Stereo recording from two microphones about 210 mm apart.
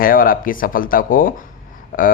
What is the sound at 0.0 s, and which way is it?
Speech, 40° left (ahead or behind).